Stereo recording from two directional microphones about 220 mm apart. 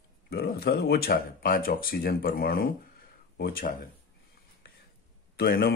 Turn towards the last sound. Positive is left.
turn(degrees=45)  # may be behind; listen again after turning